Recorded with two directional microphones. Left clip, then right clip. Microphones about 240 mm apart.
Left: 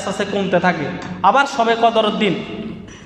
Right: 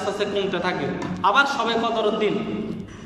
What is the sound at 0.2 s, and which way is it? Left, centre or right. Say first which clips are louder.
A man's voice: left 10 dB; left.